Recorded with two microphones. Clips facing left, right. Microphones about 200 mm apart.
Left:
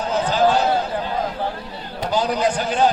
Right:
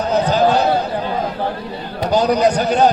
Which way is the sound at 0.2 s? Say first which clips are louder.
Right 2 dB; 40° right (ahead or behind).